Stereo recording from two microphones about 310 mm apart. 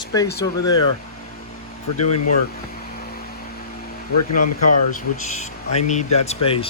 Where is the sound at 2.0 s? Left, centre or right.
Left.